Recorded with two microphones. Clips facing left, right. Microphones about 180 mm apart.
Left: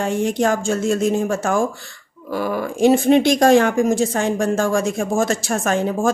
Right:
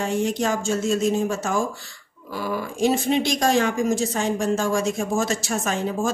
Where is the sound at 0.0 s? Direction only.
55° left (ahead or behind).